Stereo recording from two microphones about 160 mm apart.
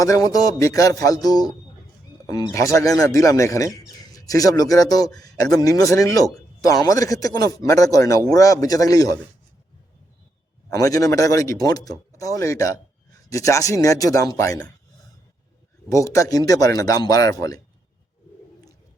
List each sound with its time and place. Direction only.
0.0 s speech: 20° left (ahead or behind)
10.7 s speech: 20° left (ahead or behind)
15.9 s speech: 20° left (ahead or behind)